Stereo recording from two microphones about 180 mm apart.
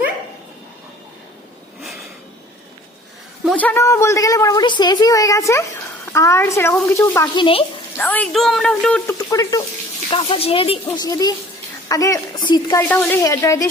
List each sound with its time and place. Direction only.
1.8 s a sound: centre (ahead or behind)
3.5 s a woman's voice: 10° left (ahead or behind)
7.3 s a woman's voice: 30° left (ahead or behind)
7.9 s speech: 10° left (ahead or behind)
9.1 s a woman's voice: 20° left (ahead or behind)
10.1 s speech: 30° left (ahead or behind)
10.9 s a woman's voice: 20° left (ahead or behind)
12.9 s speech: 10° left (ahead or behind)